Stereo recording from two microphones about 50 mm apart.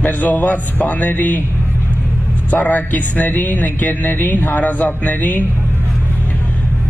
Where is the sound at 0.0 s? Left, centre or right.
Left.